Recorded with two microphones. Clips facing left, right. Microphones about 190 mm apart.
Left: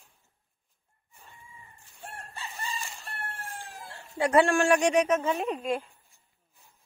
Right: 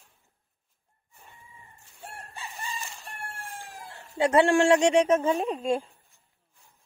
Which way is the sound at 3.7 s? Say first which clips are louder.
Even; 20° right (ahead or behind).